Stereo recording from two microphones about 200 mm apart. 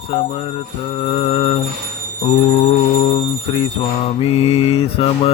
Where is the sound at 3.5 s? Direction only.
25° left (ahead or behind).